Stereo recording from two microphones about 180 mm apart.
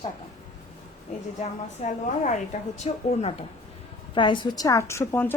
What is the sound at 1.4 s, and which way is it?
A woman's voice, 40° left (ahead or behind).